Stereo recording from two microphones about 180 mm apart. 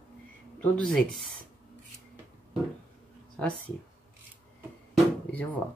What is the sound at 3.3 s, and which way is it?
Speech, 5° left (ahead or behind).